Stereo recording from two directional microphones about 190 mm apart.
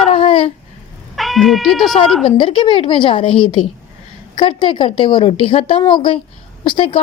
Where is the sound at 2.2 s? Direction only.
25° left (ahead or behind).